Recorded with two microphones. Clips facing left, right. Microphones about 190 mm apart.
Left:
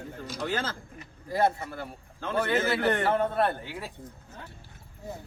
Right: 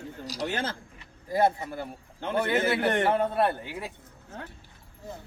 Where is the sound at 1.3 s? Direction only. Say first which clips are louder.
Right 2 dB; 15° right (ahead or behind).